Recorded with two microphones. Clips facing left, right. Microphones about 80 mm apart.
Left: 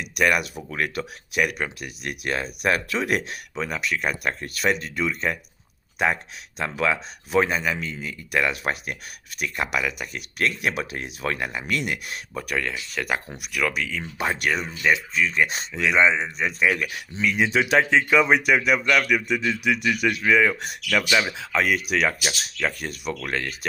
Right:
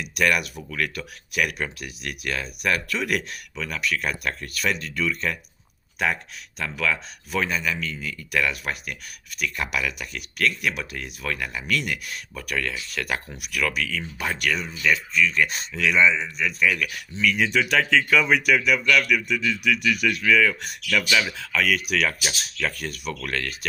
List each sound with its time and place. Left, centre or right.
0.2 s speech: centre
1.4 s speech: centre
1.8 s speech: left
6.6 s speech: left
12.5 s speech: centre
14.0 s speech: left